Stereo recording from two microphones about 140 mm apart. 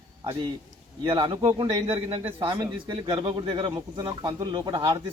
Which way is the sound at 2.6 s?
25° right (ahead or behind).